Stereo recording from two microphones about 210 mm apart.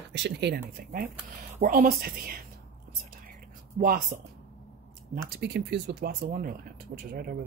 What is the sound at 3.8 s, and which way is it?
Speech, 40° right (ahead or behind).